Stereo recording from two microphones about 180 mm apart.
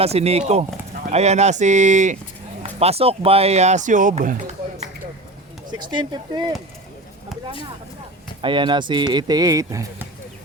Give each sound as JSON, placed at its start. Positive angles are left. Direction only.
{"t": 0.0, "sound": "speech", "side_deg": -35}
{"t": 5.8, "sound": "speech", "side_deg": -25}
{"t": 8.4, "sound": "speech", "side_deg": -25}